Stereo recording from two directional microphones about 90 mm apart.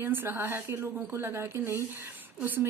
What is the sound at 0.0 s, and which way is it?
Speech, 20° right (ahead or behind).